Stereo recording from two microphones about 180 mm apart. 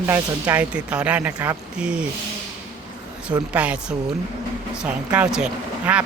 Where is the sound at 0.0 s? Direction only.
10° right (ahead or behind).